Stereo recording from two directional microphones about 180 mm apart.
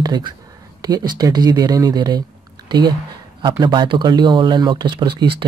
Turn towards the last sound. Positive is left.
turn(degrees=-30)  # may be behind; listen again after turning